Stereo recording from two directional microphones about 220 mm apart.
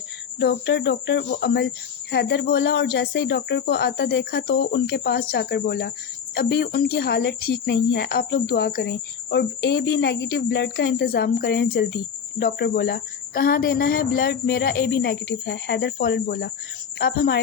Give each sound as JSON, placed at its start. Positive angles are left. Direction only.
{"t": 0.3, "sound": "speech", "side_deg": 55}